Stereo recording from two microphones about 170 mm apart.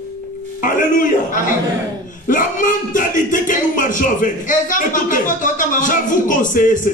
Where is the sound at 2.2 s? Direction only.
50° left (ahead or behind).